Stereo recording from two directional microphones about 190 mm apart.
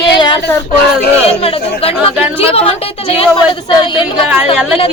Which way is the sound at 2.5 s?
30° left (ahead or behind).